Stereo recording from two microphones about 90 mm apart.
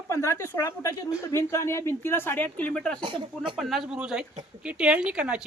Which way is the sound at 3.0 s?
60° right (ahead or behind).